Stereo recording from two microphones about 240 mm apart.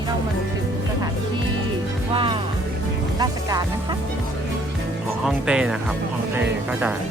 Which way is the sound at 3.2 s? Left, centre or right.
Centre.